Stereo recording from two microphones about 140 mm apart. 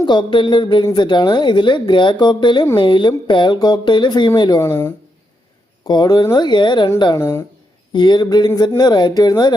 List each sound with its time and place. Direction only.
0.0 s a woman's voice: 30° left (ahead or behind)
4.7 s speech: 15° left (ahead or behind)
5.9 s a woman's voice: 30° left (ahead or behind)
7.2 s speech: 20° left (ahead or behind)
7.9 s a woman's voice: 30° left (ahead or behind)